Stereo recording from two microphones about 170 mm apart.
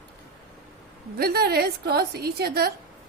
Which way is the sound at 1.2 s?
70° right (ahead or behind).